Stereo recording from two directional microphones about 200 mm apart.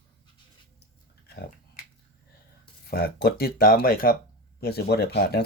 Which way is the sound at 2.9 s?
50° left (ahead or behind).